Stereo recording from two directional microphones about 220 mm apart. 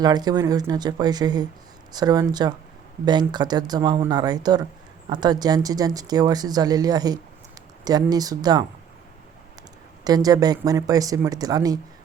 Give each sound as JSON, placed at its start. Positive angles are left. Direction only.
{"t": 0.0, "sound": "speech", "side_deg": -20}
{"t": 10.0, "sound": "speech", "side_deg": -15}